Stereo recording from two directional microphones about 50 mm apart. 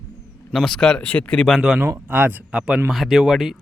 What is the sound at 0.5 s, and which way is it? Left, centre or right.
Speech, centre.